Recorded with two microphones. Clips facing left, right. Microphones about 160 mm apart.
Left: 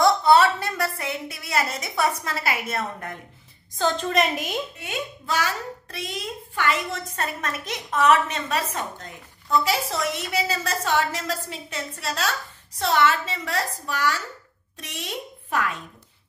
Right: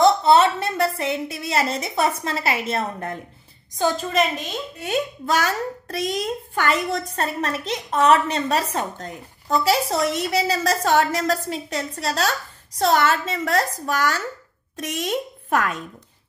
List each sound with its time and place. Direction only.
0.0 s a woman's voice: 25° right (ahead or behind)
3.7 s a woman's voice: 10° right (ahead or behind)
4.8 s a child's voice: 45° right (ahead or behind)